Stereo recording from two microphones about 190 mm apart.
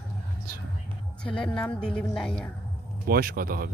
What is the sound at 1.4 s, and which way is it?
Speech, 5° left (ahead or behind).